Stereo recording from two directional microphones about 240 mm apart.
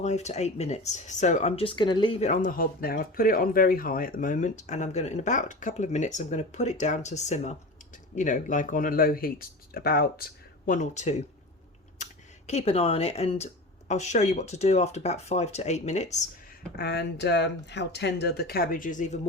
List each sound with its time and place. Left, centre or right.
0.0 s speech: left
12.5 s speech: left
16.7 s speech: left